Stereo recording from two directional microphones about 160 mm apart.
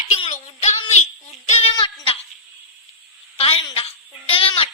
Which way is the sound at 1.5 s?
35° left (ahead or behind).